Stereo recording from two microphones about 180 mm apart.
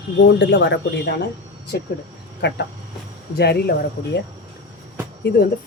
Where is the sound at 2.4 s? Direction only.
75° left (ahead or behind).